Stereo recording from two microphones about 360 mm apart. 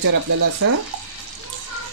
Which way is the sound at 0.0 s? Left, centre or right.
Right.